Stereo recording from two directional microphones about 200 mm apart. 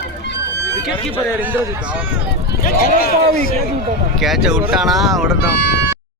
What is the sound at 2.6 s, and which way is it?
Speech, 50° left (ahead or behind).